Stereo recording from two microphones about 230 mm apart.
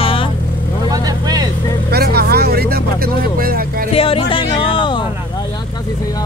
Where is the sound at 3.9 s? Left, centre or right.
Left.